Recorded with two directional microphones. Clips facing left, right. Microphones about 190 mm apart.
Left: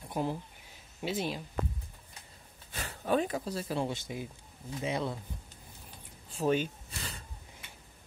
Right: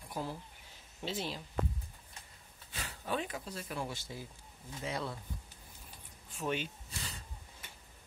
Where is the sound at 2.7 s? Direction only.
50° left (ahead or behind); by 5.2 s 20° left (ahead or behind).